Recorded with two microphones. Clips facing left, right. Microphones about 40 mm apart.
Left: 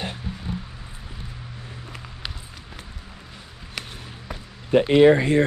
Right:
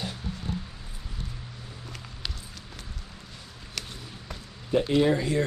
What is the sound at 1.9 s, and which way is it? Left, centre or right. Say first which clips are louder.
Run: left 2 dB; centre.